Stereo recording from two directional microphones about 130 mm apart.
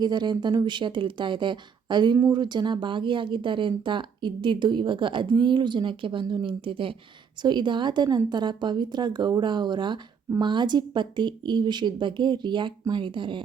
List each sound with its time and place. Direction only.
0.0 s speech: 35° right (ahead or behind)